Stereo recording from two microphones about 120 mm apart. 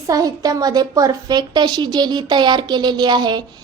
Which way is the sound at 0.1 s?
30° right (ahead or behind).